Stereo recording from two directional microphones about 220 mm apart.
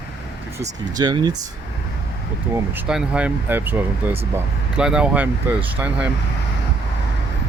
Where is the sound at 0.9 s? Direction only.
20° right (ahead or behind).